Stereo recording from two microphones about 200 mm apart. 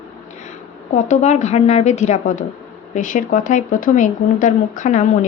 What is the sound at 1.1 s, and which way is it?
A woman's voice, 35° left (ahead or behind).